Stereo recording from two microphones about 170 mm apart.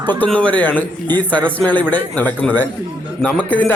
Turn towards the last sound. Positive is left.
turn(degrees=10)  # may be behind; listen again after turning